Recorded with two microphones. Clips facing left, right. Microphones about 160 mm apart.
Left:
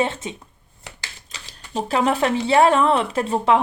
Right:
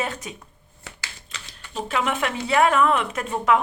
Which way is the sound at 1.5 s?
35° left (ahead or behind).